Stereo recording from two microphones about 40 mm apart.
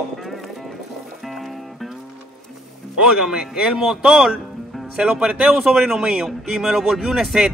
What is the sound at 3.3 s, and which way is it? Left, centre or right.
Speech, centre.